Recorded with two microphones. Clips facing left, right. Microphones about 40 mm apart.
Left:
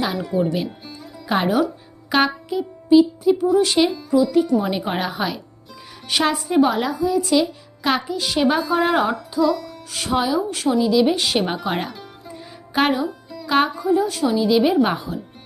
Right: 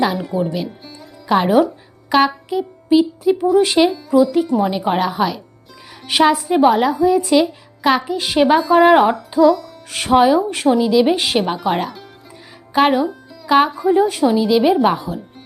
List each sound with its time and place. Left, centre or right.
0.0 s speech: centre
0.9 s music: centre
2.0 s speech: centre
3.6 s a woman's voice: centre
8.1 s music: right
8.4 s a woman's voice: centre
8.9 s music: right
9.9 s speech: right
10.8 s a woman's voice: centre
11.0 s music: centre
11.3 s music: centre
13.1 s speech: centre
13.8 s speech: right
14.3 s speech: centre